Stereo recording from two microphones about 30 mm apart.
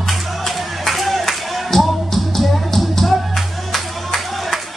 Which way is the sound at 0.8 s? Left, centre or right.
Centre.